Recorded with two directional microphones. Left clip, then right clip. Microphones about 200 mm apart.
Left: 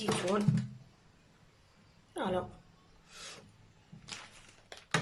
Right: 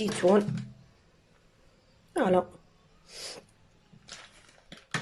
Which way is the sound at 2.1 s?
35° right (ahead or behind).